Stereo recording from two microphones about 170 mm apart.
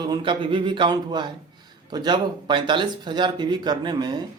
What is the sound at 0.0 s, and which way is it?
A man's voice, 25° right (ahead or behind).